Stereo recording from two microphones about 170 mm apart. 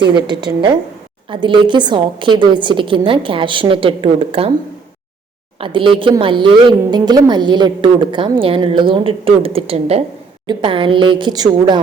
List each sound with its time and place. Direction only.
0.3 s a woman's voice: 25° right (ahead or behind)
5.5 s a woman's voice: 30° right (ahead or behind)